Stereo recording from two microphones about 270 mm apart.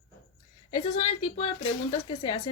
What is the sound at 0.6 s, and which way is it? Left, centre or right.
A woman's voice, left.